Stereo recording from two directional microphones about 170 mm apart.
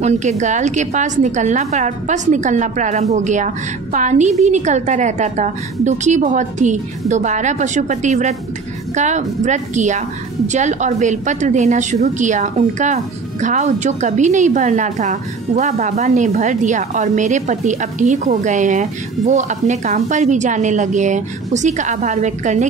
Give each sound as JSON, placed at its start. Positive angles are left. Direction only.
{"t": 0.0, "sound": "a woman's voice", "side_deg": -45}